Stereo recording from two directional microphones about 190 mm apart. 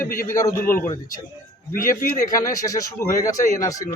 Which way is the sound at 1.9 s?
15° left (ahead or behind).